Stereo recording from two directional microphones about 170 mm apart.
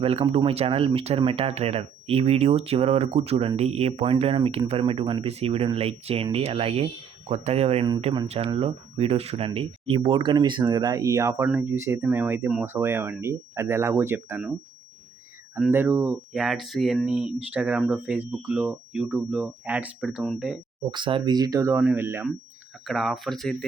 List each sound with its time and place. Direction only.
0.0 s speech: 35° right (ahead or behind); by 14.5 s 10° right (ahead or behind)
15.5 s speech: 10° right (ahead or behind)
20.9 s speech: 25° right (ahead or behind)
22.9 s speech: centre (ahead or behind)